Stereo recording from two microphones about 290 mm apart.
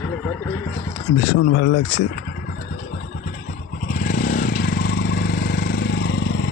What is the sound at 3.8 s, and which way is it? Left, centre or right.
Vehicle, left.